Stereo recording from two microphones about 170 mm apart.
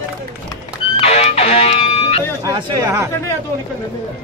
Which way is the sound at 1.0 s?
40° left (ahead or behind).